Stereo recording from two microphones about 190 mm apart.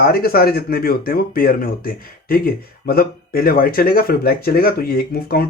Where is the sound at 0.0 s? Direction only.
50° left (ahead or behind).